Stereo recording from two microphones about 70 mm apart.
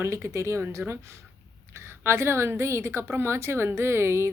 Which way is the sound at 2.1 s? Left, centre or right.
Right.